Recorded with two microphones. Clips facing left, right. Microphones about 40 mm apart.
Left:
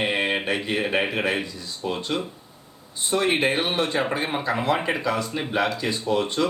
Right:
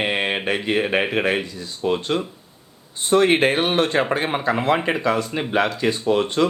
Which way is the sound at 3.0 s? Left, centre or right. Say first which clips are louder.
Right 5 dB; right.